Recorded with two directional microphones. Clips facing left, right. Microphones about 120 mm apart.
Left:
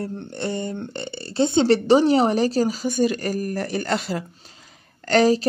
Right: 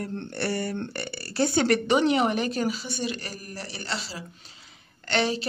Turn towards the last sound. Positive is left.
turn(degrees=40)  # may be behind; listen again after turning